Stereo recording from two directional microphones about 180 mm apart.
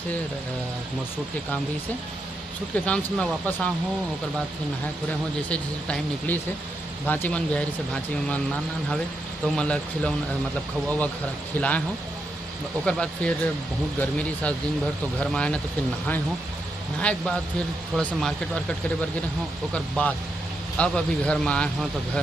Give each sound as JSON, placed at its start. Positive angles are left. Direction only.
{"t": 2.7, "sound": "speech", "side_deg": 5}
{"t": 5.5, "sound": "speech", "side_deg": 10}
{"t": 9.6, "sound": "speech", "side_deg": 5}
{"t": 11.5, "sound": "speech", "side_deg": 10}
{"t": 12.8, "sound": "speech", "side_deg": 5}
{"t": 17.0, "sound": "speech", "side_deg": 5}
{"t": 19.7, "sound": "speech", "side_deg": 5}